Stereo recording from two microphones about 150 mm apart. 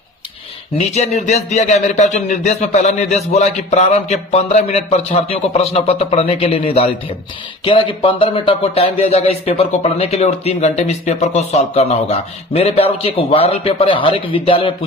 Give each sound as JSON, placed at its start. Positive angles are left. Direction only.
{"t": 0.8, "sound": "a man's voice", "side_deg": 45}